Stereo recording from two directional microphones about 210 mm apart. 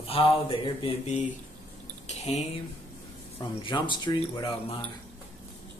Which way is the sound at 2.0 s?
30° left (ahead or behind).